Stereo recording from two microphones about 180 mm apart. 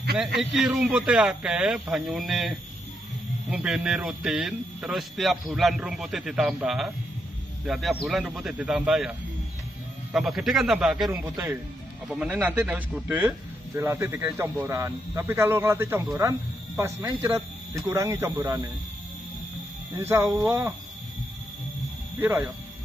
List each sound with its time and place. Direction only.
0.4 s speech: centre (ahead or behind)
10.1 s speech: centre (ahead or behind)
11.1 s a man's voice: 15° right (ahead or behind)
20.0 s a man's voice: 15° right (ahead or behind)